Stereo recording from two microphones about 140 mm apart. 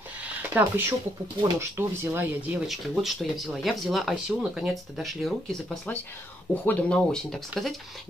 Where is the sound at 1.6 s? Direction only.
15° right (ahead or behind).